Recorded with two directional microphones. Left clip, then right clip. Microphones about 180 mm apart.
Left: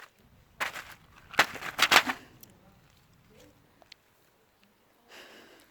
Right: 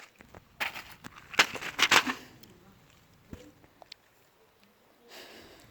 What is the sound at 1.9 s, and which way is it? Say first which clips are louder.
Shuffling cards: left 2 dB; 20° left (ahead or behind).